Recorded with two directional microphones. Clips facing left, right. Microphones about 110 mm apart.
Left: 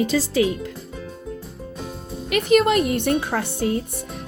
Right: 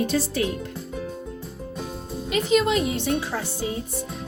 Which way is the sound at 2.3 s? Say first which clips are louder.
Left 4 dB; 60° left (ahead or behind).